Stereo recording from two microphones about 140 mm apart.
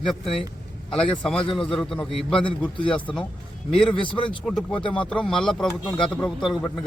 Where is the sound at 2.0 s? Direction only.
40° left (ahead or behind).